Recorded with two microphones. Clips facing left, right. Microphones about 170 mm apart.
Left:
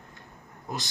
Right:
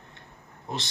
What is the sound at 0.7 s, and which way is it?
Speech, 25° right (ahead or behind).